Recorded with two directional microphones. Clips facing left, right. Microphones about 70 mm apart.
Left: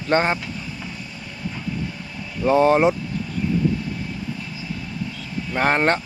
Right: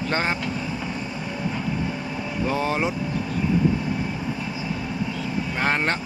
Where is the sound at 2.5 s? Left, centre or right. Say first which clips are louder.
Left 10 dB; left.